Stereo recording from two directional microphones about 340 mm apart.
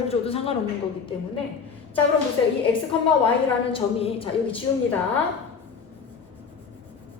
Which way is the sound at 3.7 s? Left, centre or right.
Centre.